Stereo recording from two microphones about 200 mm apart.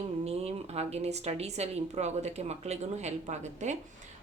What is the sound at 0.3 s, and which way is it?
Speech, 30° right (ahead or behind).